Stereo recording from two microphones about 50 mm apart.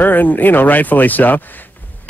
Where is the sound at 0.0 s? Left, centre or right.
Left.